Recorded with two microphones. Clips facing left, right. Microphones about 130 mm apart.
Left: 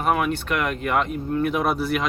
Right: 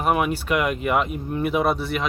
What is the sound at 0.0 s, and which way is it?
Speech, 10° right (ahead or behind).